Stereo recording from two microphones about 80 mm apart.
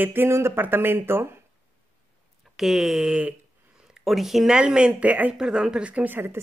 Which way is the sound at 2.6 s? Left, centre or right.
Centre.